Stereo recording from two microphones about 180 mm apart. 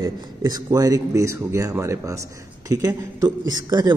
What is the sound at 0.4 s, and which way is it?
A man's voice, 20° right (ahead or behind).